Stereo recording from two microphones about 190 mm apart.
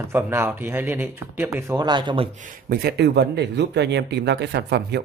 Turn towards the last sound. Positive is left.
turn(degrees=-60)  # may be behind; listen again after turning